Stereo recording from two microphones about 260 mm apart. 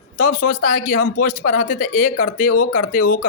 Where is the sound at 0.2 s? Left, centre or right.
Left.